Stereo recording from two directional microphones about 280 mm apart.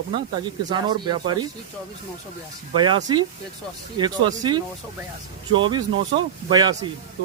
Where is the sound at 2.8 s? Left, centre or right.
Centre.